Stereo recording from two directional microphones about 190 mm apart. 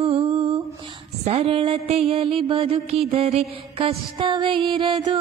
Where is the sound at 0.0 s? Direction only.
30° right (ahead or behind).